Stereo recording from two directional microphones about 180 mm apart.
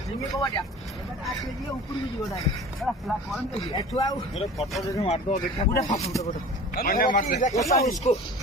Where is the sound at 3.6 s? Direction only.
25° left (ahead or behind).